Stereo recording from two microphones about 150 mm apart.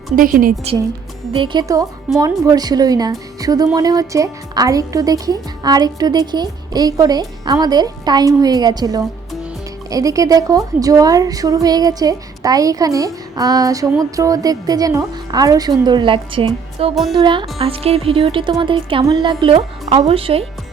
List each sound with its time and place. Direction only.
0.2 s a woman's voice: 70° right (ahead or behind)
1.3 s speech: 35° right (ahead or behind)
1.6 s speech: 25° right (ahead or behind)
16.9 s speech: centre (ahead or behind)
17.2 s speech: 30° right (ahead or behind)